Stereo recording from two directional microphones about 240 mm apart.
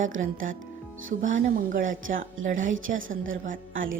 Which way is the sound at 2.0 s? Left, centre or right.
Right.